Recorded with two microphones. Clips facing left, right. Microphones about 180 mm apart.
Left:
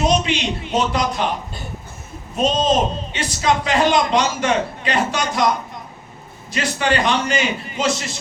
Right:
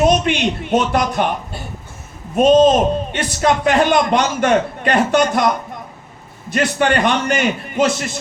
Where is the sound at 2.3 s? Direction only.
55° right (ahead or behind).